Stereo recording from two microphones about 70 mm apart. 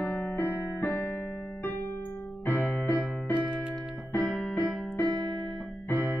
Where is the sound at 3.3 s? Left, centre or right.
Centre.